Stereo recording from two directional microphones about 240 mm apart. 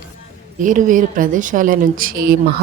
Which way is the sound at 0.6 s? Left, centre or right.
Right.